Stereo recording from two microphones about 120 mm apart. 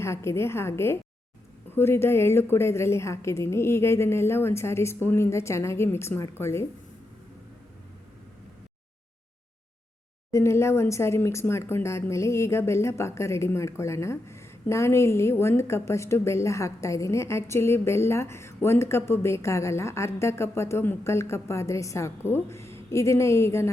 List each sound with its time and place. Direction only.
0.0 s speech: 20° left (ahead or behind)
10.3 s speech: 20° left (ahead or behind)